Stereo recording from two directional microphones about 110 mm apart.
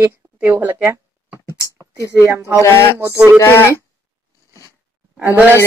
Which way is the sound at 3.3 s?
25° left (ahead or behind).